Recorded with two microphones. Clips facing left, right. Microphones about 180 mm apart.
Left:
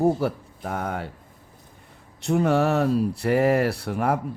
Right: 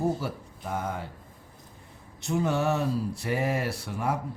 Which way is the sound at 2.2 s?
60° left (ahead or behind).